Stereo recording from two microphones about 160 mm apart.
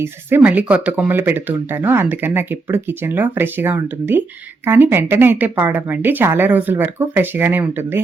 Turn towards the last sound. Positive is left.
turn(degrees=-15)  # may be behind; listen again after turning